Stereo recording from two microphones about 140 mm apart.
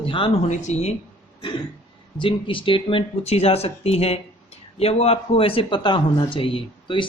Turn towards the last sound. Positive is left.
turn(degrees=40)  # may be behind; listen again after turning